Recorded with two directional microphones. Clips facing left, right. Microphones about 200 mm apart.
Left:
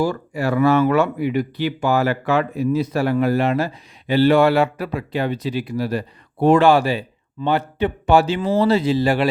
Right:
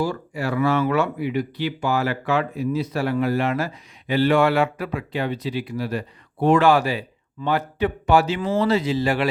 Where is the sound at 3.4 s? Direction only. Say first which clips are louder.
Left 4 dB; 30° left (ahead or behind).